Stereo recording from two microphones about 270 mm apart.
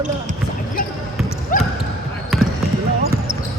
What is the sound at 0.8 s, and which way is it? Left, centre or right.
Basketball bounce, left.